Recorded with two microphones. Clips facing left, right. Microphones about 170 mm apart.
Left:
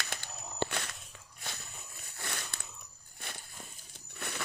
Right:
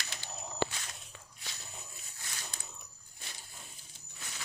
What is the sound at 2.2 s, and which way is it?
Biting, 65° left (ahead or behind).